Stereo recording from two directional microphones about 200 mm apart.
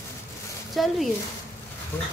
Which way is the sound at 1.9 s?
10° left (ahead or behind).